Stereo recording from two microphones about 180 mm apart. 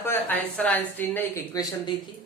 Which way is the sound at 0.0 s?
10° left (ahead or behind).